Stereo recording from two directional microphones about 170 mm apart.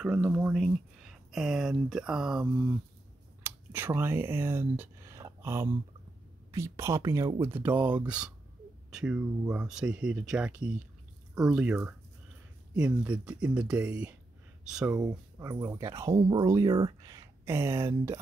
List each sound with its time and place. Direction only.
0.0 s speech: 5° right (ahead or behind)
3.4 s speech: 10° right (ahead or behind)
15.0 s speech: 20° right (ahead or behind)
16.2 s speech: 30° right (ahead or behind)